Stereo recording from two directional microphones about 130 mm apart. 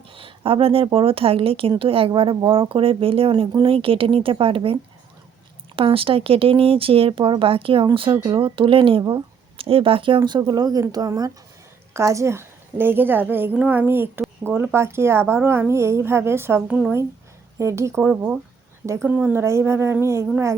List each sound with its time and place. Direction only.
0.1 s a woman's voice: 45° right (ahead or behind); by 20.2 s 20° right (ahead or behind)